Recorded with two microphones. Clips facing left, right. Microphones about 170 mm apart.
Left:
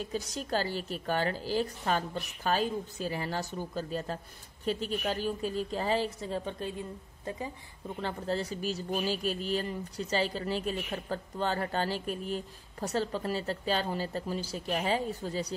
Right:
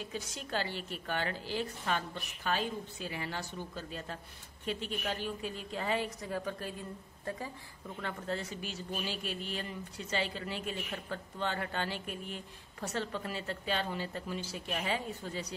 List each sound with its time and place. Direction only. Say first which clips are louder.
0.1 s a woman's voice: left 6 dB; 40° left (ahead or behind); by 7.5 s 20° left (ahead or behind)
8.0 s speech: left 5 dB; 35° left (ahead or behind)